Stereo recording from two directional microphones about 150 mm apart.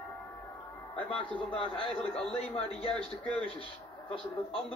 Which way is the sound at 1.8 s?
40° left (ahead or behind).